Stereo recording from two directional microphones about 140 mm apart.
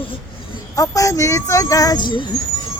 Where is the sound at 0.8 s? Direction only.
25° left (ahead or behind).